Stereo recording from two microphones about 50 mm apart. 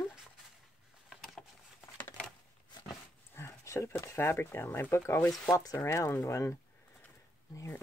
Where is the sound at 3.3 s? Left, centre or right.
Left.